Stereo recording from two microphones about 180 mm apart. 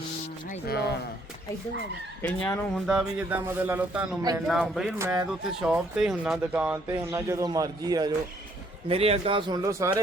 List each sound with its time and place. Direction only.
2.2 s a man's voice: 10° left (ahead or behind)
4.9 s speech: 15° right (ahead or behind)
5.3 s speech: 5° right (ahead or behind); by 8.1 s 20° right (ahead or behind)
8.9 s speech: 35° right (ahead or behind); by 10.0 s 15° right (ahead or behind)